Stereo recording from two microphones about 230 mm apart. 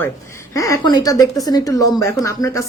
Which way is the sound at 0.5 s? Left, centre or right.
Centre.